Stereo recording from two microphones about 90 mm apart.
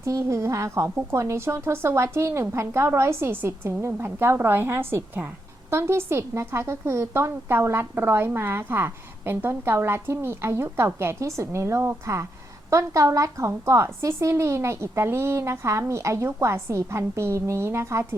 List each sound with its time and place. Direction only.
0.0 s a woman's voice: 35° right (ahead or behind)